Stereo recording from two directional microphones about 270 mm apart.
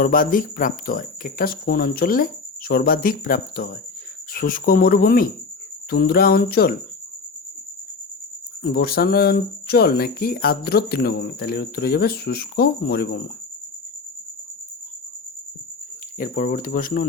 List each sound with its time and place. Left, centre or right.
0.0 s speech: left
8.7 s speech: left
16.1 s speech: left